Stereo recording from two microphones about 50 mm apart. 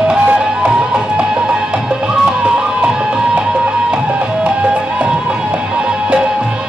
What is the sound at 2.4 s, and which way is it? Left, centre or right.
Music, centre.